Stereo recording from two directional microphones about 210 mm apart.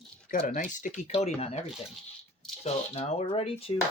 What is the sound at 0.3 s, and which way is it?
Speech, 40° left (ahead or behind).